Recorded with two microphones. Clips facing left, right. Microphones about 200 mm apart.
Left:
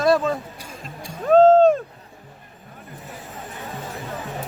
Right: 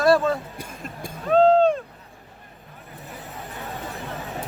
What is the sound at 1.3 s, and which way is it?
Vehicle, 45° left (ahead or behind).